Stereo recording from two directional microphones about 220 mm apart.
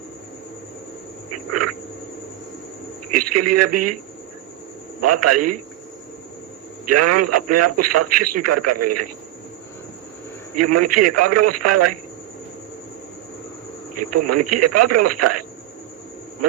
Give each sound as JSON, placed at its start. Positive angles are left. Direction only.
{"t": 3.2, "sound": "a man's voice", "side_deg": -90}
{"t": 4.9, "sound": "a man's voice", "side_deg": -90}
{"t": 6.8, "sound": "a man's voice", "side_deg": -90}
{"t": 10.5, "sound": "a man's voice", "side_deg": -90}
{"t": 13.9, "sound": "a man's voice", "side_deg": -90}